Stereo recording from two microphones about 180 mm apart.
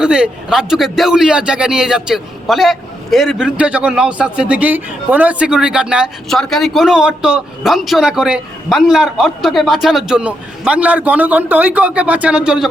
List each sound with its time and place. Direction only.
0.0 s a man's voice: 5° right (ahead or behind)